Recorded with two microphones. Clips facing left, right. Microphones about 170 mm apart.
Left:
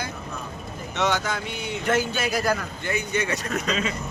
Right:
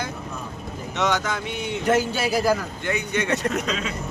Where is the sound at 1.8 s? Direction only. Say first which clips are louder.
Right 3 dB; 35° right (ahead or behind).